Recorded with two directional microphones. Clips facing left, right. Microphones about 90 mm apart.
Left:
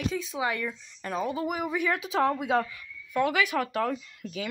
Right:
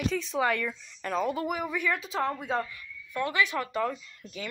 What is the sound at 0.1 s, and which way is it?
Speech, 10° left (ahead or behind).